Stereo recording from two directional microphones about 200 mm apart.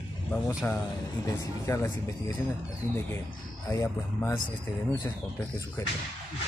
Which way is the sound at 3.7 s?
15° left (ahead or behind).